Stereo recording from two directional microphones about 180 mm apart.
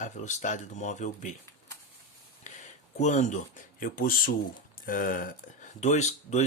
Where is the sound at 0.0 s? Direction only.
40° left (ahead or behind).